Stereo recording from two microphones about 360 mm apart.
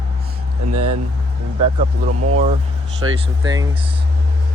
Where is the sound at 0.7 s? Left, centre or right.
Right.